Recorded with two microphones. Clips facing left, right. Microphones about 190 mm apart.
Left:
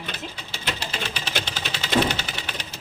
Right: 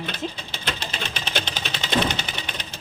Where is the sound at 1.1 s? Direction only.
10° left (ahead or behind).